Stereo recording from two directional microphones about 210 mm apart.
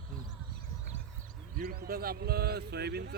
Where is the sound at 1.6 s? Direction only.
45° right (ahead or behind).